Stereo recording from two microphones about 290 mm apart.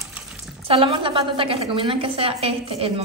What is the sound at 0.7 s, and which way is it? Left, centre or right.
A woman's voice, centre.